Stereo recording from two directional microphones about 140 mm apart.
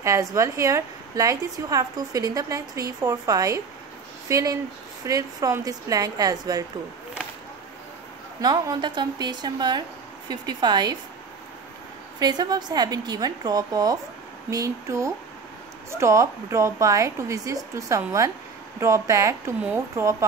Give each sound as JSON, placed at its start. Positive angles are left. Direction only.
{"t": 0.0, "sound": "a woman's voice", "side_deg": -20}
{"t": 8.4, "sound": "speech", "side_deg": -30}
{"t": 12.2, "sound": "a woman's voice", "side_deg": -30}